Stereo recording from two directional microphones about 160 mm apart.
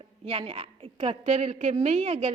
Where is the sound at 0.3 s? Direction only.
35° right (ahead or behind).